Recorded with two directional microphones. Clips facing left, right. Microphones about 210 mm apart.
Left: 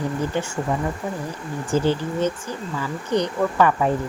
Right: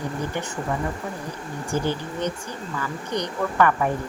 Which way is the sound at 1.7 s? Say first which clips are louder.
Left 5 dB; 15° right (ahead or behind).